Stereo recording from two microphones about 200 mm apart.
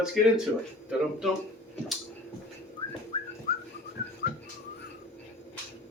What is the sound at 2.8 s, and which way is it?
Bird, 25° left (ahead or behind).